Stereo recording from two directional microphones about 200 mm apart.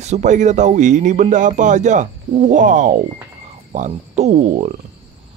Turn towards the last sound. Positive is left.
turn(degrees=-35)  # may be behind; listen again after turning